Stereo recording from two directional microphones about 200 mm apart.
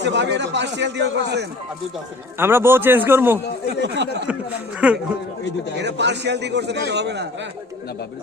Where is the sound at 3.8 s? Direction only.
60° right (ahead or behind).